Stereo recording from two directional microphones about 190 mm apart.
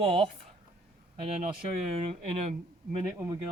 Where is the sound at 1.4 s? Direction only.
30° right (ahead or behind).